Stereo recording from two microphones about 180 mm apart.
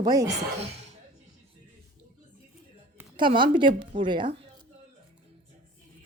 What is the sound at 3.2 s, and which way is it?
A child's voice, 25° right (ahead or behind).